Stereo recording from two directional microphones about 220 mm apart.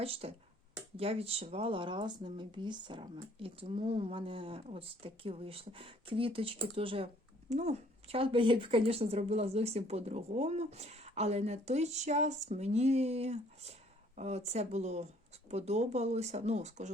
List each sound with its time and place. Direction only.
0.0 s a woman's voice: 25° right (ahead or behind)